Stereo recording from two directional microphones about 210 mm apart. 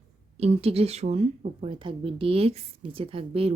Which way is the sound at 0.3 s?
30° right (ahead or behind).